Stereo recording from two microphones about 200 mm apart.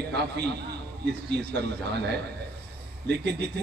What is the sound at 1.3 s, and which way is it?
Speech, 55° right (ahead or behind).